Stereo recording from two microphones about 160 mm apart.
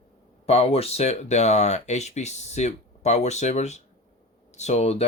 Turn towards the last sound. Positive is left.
turn(degrees=40)  # may be behind; listen again after turning